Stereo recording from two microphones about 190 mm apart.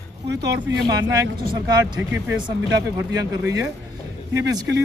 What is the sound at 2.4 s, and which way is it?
Speech, 20° right (ahead or behind).